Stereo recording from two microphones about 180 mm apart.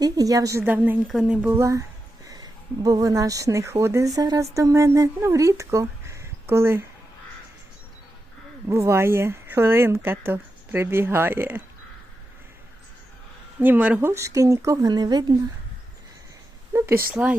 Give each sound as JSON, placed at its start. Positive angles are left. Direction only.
{"t": 0.0, "sound": "speech", "side_deg": -20}
{"t": 8.7, "sound": "speech", "side_deg": -15}
{"t": 13.6, "sound": "speech", "side_deg": -10}
{"t": 16.7, "sound": "speech", "side_deg": -10}